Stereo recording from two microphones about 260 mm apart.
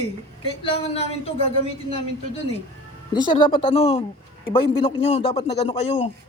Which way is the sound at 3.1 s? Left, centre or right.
Centre.